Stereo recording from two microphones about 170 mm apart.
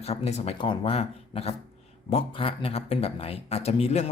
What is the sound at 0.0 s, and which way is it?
Speech, 40° left (ahead or behind).